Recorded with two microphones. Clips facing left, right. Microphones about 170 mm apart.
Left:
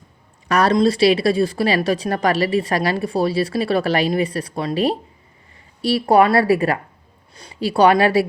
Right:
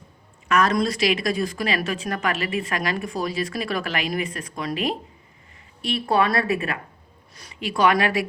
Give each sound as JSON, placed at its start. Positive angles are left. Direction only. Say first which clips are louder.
{"t": 0.4, "sound": "a woman's voice", "louder": "left 5 dB", "side_deg": 35}